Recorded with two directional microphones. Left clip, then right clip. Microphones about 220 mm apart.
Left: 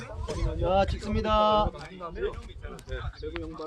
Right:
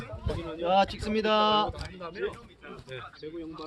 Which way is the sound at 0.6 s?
45° right (ahead or behind).